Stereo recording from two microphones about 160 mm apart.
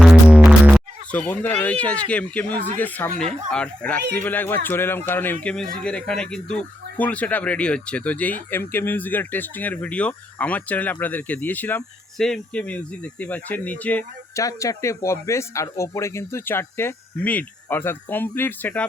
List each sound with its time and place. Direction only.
0.3 s music: 5° right (ahead or behind)
1.1 s speech: 10° left (ahead or behind)
14.4 s speech: 20° left (ahead or behind)